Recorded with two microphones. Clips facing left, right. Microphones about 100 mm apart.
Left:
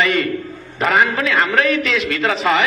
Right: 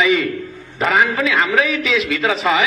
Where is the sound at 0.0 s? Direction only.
Centre (ahead or behind).